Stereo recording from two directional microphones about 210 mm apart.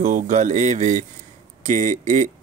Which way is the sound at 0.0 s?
35° right (ahead or behind).